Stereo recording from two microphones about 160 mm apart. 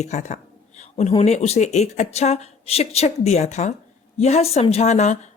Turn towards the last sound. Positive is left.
turn(degrees=45)  # may be behind; listen again after turning